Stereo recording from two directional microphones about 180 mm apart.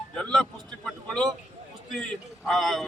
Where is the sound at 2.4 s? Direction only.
Centre (ahead or behind).